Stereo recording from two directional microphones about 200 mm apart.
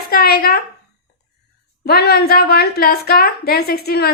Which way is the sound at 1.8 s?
50° left (ahead or behind).